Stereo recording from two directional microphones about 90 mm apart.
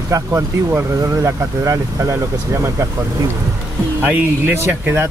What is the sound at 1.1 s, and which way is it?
Speech, 35° right (ahead or behind).